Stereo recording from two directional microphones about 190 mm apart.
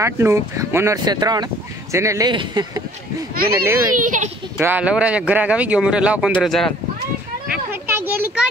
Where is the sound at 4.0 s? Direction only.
40° right (ahead or behind).